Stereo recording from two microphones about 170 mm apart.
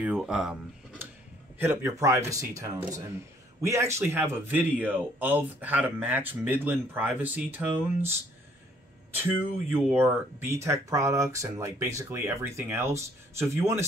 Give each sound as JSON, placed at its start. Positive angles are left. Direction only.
{"t": 0.0, "sound": "speech", "side_deg": -5}
{"t": 9.1, "sound": "speech", "side_deg": -10}